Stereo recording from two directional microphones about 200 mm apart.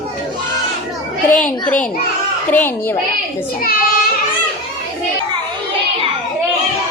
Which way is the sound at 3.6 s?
45° left (ahead or behind).